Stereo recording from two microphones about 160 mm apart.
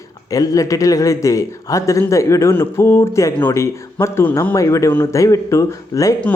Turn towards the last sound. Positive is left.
turn(degrees=20)  # may be behind; listen again after turning